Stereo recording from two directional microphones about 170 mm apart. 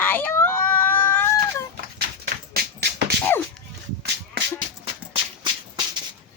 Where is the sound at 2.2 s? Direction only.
65° right (ahead or behind).